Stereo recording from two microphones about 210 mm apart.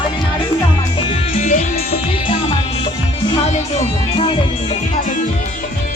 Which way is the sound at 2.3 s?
25° left (ahead or behind).